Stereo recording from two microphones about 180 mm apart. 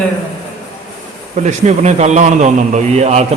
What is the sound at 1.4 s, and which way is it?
A man's voice, 40° right (ahead or behind).